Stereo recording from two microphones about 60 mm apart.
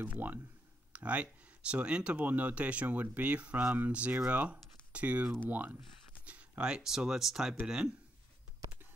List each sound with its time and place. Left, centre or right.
0.0 s speech: right
6.6 s speech: centre